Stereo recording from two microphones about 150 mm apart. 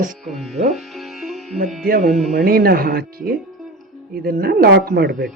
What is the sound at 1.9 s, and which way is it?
Speech, 80° right.